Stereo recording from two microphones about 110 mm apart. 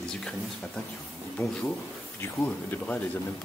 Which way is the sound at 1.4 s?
20° left (ahead or behind).